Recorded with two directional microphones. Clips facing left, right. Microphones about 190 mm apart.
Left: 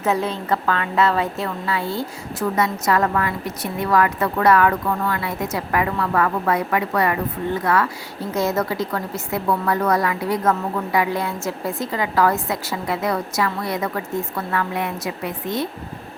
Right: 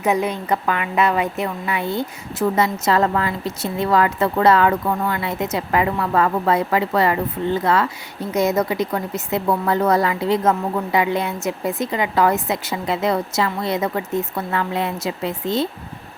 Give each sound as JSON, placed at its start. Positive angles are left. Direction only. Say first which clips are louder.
{"t": 0.0, "sound": "a woman's voice", "louder": "right 2 dB", "side_deg": -15}